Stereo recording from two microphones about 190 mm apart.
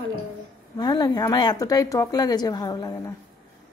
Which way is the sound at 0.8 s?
20° left (ahead or behind).